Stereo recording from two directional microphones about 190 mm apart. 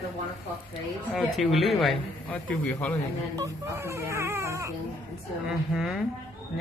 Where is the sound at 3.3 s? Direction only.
15° right (ahead or behind).